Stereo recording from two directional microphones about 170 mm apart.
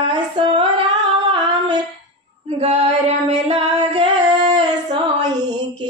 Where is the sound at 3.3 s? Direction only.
35° right (ahead or behind).